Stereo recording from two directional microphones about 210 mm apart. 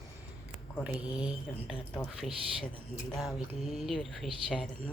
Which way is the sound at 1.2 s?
5° right (ahead or behind).